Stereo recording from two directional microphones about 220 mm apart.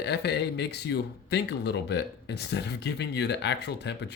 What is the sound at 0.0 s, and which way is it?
Speech, 50° left (ahead or behind).